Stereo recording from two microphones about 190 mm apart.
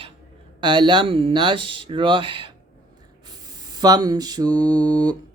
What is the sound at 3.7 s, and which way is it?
Speech, 20° right (ahead or behind).